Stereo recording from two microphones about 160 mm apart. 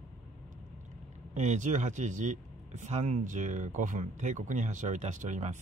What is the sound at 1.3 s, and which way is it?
Speech, 45° right (ahead or behind).